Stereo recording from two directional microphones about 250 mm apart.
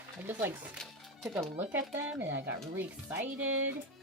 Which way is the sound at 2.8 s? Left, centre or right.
Centre.